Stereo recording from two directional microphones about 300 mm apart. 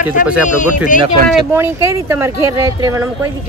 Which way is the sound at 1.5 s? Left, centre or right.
Centre.